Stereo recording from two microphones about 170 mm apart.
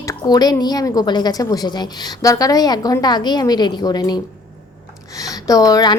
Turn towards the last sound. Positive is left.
turn(degrees=20)  # may be behind; listen again after turning